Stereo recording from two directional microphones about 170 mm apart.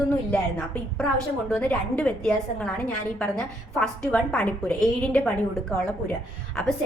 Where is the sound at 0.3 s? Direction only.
10° left (ahead or behind).